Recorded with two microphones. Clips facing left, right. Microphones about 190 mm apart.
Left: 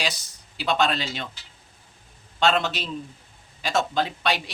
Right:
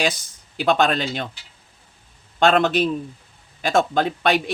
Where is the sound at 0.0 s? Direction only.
50° right (ahead or behind).